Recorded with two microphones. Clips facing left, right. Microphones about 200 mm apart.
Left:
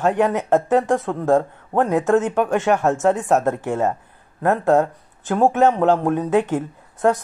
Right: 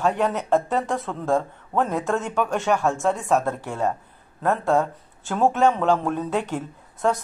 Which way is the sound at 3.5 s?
50° left (ahead or behind).